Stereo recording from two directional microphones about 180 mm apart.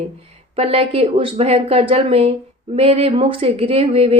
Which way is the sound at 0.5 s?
30° right (ahead or behind).